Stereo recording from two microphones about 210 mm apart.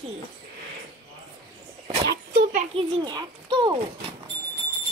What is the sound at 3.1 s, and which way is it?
Speech, 20° right (ahead or behind).